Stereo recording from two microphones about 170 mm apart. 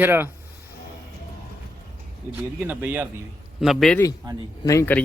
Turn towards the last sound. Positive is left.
turn(degrees=15)  # may be behind; listen again after turning